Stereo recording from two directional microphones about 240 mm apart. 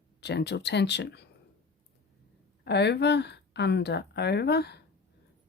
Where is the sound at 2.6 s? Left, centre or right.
Left.